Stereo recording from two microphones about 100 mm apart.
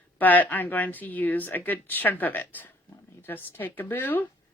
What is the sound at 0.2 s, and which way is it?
Speech, 15° left (ahead or behind).